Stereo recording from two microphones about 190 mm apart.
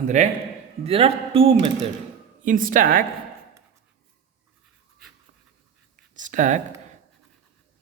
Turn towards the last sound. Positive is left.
turn(degrees=-40)  # may be behind; listen again after turning